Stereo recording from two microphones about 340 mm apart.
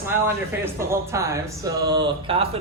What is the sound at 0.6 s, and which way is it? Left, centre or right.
Speech, centre.